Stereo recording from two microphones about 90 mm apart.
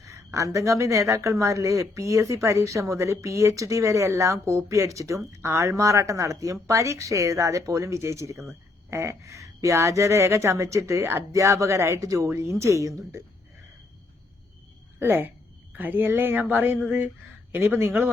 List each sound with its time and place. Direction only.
0.0 s speech: 35° right (ahead or behind)
14.9 s a woman's voice: 25° right (ahead or behind)
16.8 s a sound: 20° right (ahead or behind)
17.5 s a woman's voice: 25° right (ahead or behind)